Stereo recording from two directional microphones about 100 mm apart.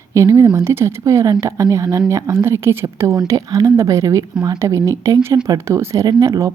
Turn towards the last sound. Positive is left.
turn(degrees=-35)  # may be behind; listen again after turning